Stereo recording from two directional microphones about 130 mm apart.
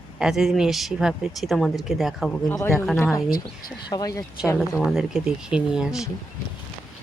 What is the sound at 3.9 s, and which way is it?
Speech, 30° left (ahead or behind).